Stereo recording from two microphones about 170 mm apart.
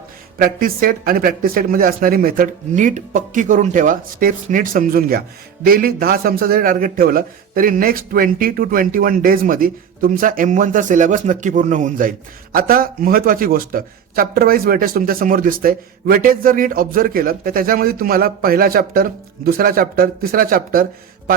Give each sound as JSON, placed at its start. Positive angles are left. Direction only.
{"t": 0.3, "sound": "speech", "side_deg": -60}